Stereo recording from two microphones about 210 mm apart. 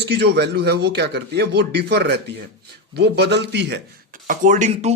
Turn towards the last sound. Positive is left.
turn(degrees=-35)  # may be behind; listen again after turning